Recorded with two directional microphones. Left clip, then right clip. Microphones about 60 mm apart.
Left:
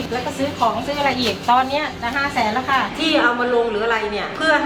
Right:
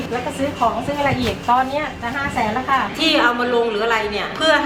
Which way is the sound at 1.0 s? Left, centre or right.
Left.